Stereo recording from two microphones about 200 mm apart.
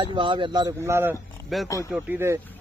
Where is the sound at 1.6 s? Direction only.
15° left (ahead or behind).